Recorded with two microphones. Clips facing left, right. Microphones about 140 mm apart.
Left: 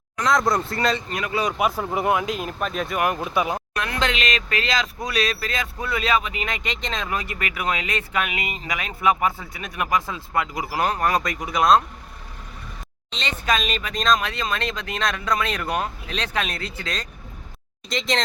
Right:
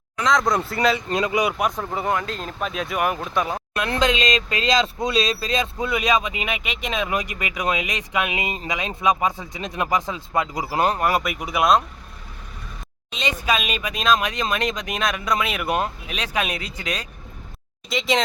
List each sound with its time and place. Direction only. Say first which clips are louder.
0.3 s speech: even; 5° left (ahead or behind)
1.1 s speech: right 4 dB; 20° right (ahead or behind)
1.5 s speech: left 1 dB; 5° left (ahead or behind)
2.6 s speech: right 2 dB; centre (ahead or behind)
4.0 s speech: right 4 dB; 20° right (ahead or behind)
11.0 s speech: right 1 dB; 5° right (ahead or behind)
13.1 s speech: right 1 dB; 10° right (ahead or behind)